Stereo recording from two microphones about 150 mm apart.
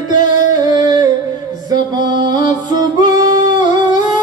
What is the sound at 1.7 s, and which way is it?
Music, 30° right (ahead or behind).